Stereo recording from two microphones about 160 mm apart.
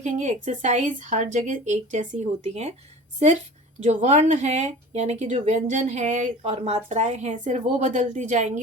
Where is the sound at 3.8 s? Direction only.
45° right (ahead or behind).